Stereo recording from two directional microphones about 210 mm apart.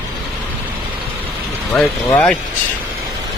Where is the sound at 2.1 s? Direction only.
10° left (ahead or behind).